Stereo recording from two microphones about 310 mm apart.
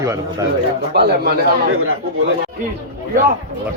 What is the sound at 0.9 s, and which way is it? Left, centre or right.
Speech, right.